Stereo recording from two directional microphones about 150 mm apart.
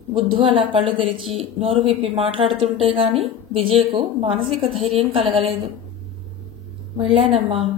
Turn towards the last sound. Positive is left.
turn(degrees=-40)  # may be behind; listen again after turning